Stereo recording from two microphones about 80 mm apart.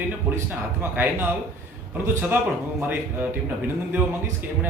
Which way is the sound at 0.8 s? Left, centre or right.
Right.